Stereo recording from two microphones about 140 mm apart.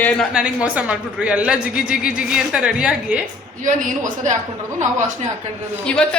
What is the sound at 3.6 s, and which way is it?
Speech, 65° right (ahead or behind).